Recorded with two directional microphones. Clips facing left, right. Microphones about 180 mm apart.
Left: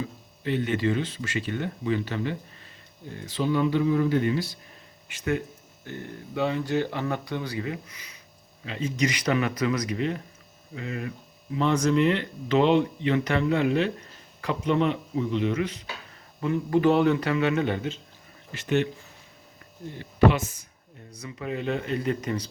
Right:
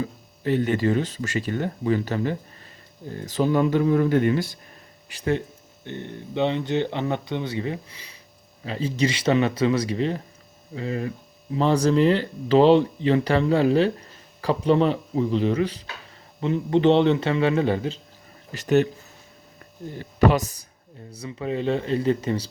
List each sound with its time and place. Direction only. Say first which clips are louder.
0.0 s speech: right 4 dB; 40° right (ahead or behind)
5.0 s speech: right 3 dB; 35° right (ahead or behind)
20.0 s speech: right 1 dB; 40° right (ahead or behind)